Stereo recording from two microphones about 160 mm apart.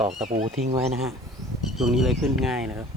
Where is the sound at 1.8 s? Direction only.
Centre (ahead or behind).